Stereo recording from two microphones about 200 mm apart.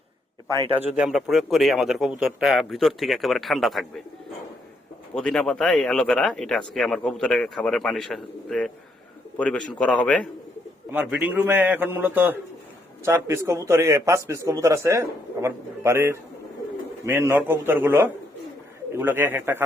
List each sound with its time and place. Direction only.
0.7 s speech: 10° right (ahead or behind)
5.1 s speech: 5° left (ahead or behind)
10.9 s a man's voice: 5° right (ahead or behind)